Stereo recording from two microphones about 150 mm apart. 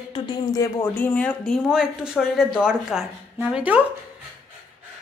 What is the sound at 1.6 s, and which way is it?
A woman's voice, 5° right (ahead or behind).